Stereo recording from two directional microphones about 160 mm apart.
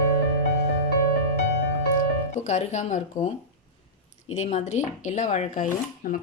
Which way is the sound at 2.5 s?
45° left (ahead or behind).